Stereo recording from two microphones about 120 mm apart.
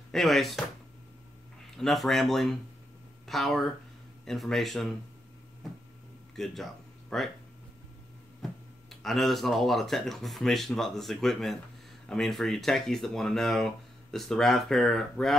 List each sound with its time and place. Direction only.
0.1 s speech: centre (ahead or behind)
1.8 s speech: centre (ahead or behind)
6.3 s speech: centre (ahead or behind)
9.0 s speech: centre (ahead or behind)